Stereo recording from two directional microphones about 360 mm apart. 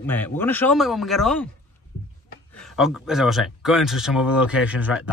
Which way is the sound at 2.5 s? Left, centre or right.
Centre.